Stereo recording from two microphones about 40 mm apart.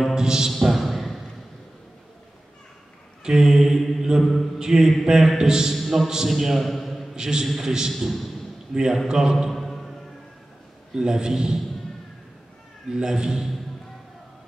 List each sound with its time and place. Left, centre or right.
0.1 s speech: centre
0.5 s a sound: centre
3.3 s a man's voice: centre
4.2 s a man's voice: centre
4.6 s a man's voice: centre
6.3 s a man's voice: centre
7.2 s a man's voice: centre
8.0 s a man's voice: centre
8.7 s a man's voice: centre
9.5 s music: centre
11.0 s a man's voice: centre
12.9 s a man's voice: centre